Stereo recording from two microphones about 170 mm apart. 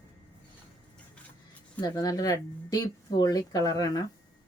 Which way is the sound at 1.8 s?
20° left (ahead or behind).